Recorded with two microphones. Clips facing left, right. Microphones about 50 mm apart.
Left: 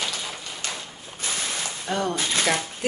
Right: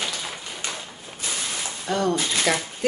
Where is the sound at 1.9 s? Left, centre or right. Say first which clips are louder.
Right 3 dB; centre.